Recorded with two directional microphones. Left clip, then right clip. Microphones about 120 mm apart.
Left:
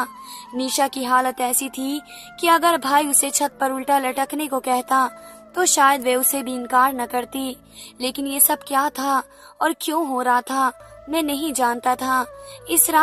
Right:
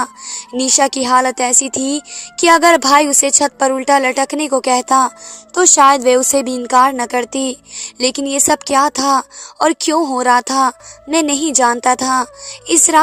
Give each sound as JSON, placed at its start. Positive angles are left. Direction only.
{"t": 0.0, "sound": "speech", "side_deg": -50}